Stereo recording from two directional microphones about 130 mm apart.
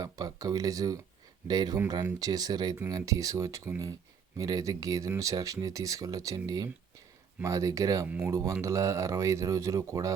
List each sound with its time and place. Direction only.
0.0 s speech: 30° right (ahead or behind)
8.0 s speech: 10° right (ahead or behind)
8.3 s speech: 25° right (ahead or behind)